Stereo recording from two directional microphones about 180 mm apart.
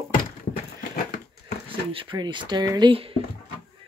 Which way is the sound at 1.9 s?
25° right (ahead or behind).